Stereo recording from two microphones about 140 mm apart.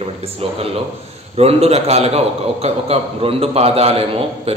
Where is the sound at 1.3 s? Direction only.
45° right (ahead or behind).